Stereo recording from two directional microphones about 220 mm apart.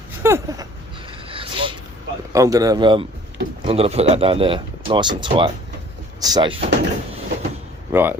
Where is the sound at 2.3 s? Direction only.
15° right (ahead or behind).